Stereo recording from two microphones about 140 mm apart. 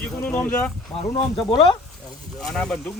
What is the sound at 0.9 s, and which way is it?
Speech, 25° left (ahead or behind).